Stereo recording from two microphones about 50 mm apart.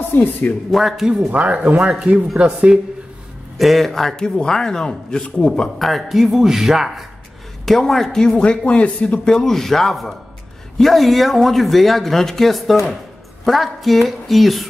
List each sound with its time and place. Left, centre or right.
0.1 s speech: left
0.7 s speech: centre
1.3 s speech: right
3.5 s speech: centre
5.8 s speech: centre
7.6 s speech: centre
9.3 s speech: centre